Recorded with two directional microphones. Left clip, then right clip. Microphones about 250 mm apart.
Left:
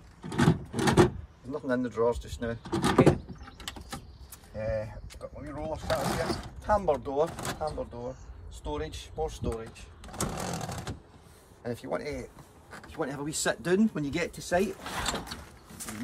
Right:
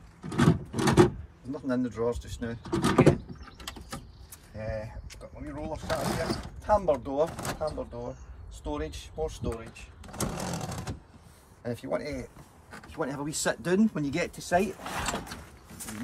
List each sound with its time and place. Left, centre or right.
0.4 s a sound: centre
1.5 s speech: centre
2.6 s speech: centre
4.6 s speech: centre